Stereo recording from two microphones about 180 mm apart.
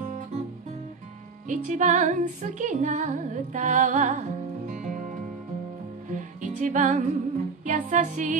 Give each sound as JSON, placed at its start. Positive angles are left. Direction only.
{"t": 1.5, "sound": "music", "side_deg": -45}